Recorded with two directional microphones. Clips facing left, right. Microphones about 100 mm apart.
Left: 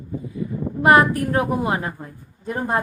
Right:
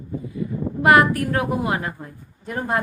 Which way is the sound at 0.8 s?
25° left (ahead or behind).